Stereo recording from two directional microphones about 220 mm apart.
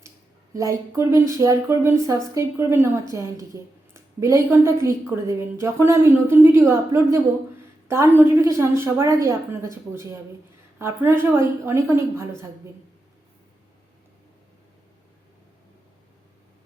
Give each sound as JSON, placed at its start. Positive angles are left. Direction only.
{"t": 0.5, "sound": "a woman's voice", "side_deg": -15}